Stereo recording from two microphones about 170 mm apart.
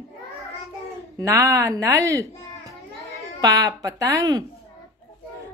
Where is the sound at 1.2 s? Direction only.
15° right (ahead or behind).